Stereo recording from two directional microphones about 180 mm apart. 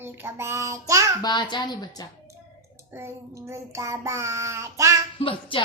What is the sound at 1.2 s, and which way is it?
Speech, 25° left (ahead or behind).